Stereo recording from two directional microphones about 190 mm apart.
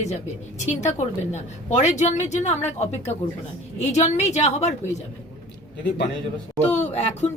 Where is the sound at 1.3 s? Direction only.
35° left (ahead or behind).